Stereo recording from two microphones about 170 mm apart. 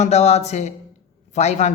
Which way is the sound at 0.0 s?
40° left (ahead or behind).